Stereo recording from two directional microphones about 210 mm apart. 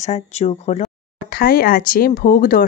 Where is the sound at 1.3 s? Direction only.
45° left (ahead or behind).